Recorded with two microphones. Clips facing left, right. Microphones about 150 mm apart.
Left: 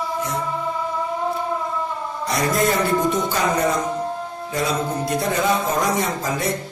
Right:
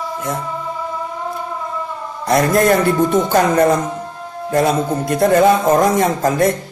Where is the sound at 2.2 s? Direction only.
55° right (ahead or behind).